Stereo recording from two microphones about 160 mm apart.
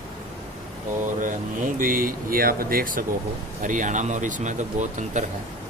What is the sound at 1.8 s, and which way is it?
Speech, 60° right (ahead or behind).